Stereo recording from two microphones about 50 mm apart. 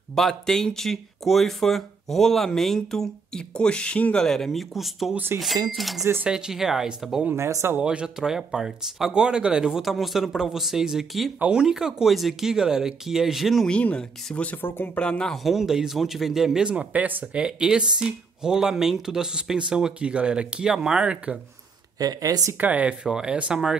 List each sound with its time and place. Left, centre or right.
0.1 s speech: centre
4.2 s speech: centre
6.2 s speech: centre
9.7 s speech: centre
13.9 s speech: left
15.3 s speech: centre
16.6 s speech: right
22.6 s speech: right
23.0 s speech: centre
23.3 s speech: right